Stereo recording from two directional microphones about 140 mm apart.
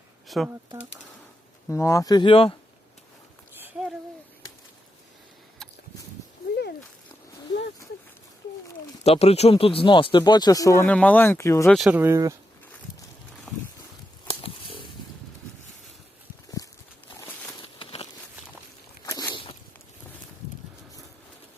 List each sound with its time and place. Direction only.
0.3 s speech: centre (ahead or behind)
1.7 s speech: 20° left (ahead or behind)
2.3 s speech: 40° left (ahead or behind)
9.0 s speech: 50° left (ahead or behind); by 10.8 s 25° left (ahead or behind)
10.8 s speech: 10° left (ahead or behind)
11.9 s speech: 15° right (ahead or behind)
13.5 s boat: centre (ahead or behind)
14.3 s a sound: 40° left (ahead or behind)
17.6 s a sound: 40° left (ahead or behind)
19.0 s a sound: 30° left (ahead or behind)